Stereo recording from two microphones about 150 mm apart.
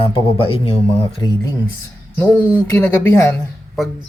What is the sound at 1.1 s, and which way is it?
Speech, 25° left (ahead or behind).